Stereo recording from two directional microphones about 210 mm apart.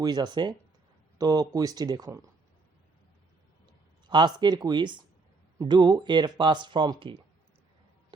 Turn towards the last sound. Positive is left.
turn(degrees=-20)  # may be behind; listen again after turning